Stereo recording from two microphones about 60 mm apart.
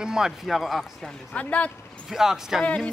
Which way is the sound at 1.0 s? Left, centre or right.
Left.